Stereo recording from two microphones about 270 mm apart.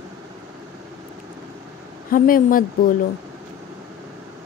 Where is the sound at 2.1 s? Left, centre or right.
Left.